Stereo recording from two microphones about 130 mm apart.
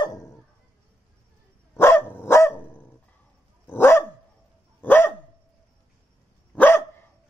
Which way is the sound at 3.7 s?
20° left (ahead or behind).